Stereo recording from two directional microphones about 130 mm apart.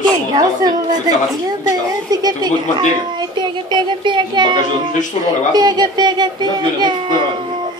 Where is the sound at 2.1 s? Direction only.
30° right (ahead or behind).